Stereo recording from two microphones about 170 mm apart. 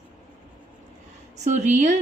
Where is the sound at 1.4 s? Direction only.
45° right (ahead or behind).